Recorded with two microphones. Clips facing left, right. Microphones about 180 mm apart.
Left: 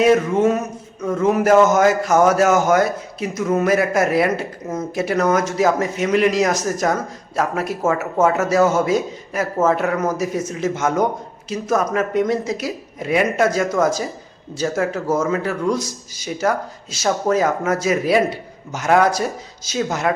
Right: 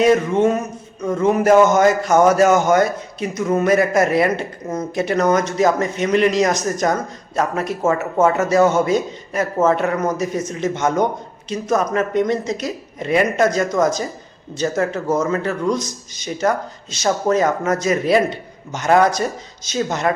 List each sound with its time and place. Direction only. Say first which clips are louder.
0.0 s a man's voice: even; 5° left (ahead or behind)